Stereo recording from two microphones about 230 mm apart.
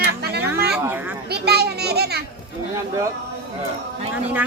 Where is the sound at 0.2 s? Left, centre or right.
Right.